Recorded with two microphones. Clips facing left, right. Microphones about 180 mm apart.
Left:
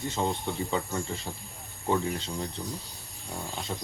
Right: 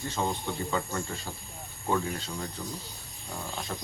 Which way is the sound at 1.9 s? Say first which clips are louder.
Left 2 dB; 25° left (ahead or behind).